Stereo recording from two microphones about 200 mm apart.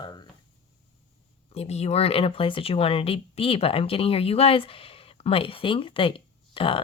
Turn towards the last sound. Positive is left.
turn(degrees=25)  # may be behind; listen again after turning